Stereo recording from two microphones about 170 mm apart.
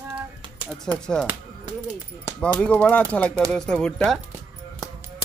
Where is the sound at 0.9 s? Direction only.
5° left (ahead or behind).